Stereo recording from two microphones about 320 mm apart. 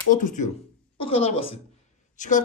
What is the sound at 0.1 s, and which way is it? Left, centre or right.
A woman's voice, left.